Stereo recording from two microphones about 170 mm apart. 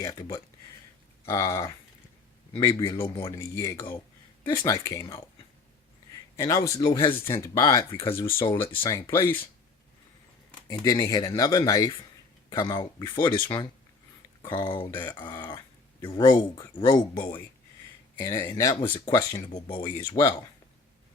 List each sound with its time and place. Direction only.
0.0 s speech: 25° left (ahead or behind)
6.3 s speech: 20° left (ahead or behind)
8.7 s speech: 25° left (ahead or behind)
10.7 s speech: 20° left (ahead or behind)
18.2 s speech: 15° left (ahead or behind)